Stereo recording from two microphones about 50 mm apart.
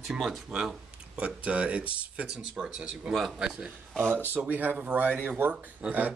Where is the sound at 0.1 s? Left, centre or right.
Centre.